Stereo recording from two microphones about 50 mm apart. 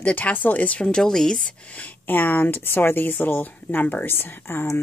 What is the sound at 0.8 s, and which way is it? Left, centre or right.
Speech, centre.